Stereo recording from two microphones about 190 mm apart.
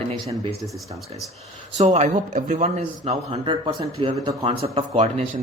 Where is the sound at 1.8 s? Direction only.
35° right (ahead or behind).